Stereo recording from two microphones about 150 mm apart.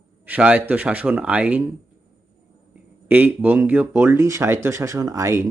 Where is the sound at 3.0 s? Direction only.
10° right (ahead or behind).